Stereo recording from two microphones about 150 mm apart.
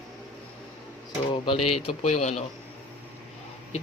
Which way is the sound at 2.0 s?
50° left (ahead or behind).